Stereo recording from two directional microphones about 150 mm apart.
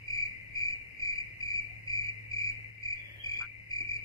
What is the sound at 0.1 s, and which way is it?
Cricket, 25° left (ahead or behind).